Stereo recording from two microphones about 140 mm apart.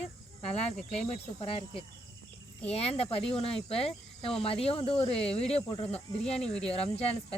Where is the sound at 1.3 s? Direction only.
40° left (ahead or behind).